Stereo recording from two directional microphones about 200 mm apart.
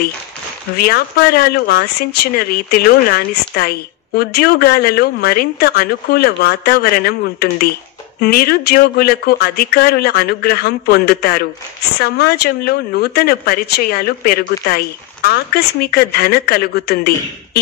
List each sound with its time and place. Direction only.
0.7 s speech: 50° left (ahead or behind)